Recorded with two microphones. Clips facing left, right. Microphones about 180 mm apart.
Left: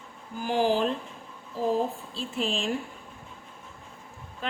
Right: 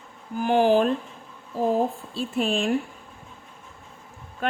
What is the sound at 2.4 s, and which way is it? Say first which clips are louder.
Speech: right 5 dB; 55° right (ahead or behind).